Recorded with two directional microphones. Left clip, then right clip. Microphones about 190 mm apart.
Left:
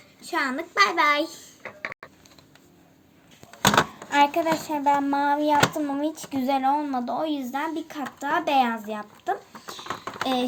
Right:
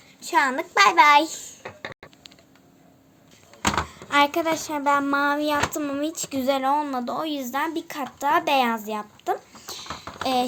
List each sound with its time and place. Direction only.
0.3 s speech: 60° right (ahead or behind)
4.1 s speech: 50° right (ahead or behind)